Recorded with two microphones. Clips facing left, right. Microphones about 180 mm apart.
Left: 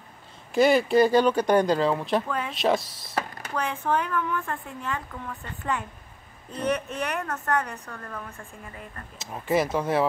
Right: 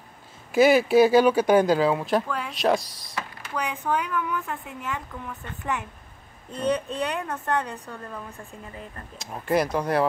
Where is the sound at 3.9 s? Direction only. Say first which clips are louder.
Even; 10° right (ahead or behind).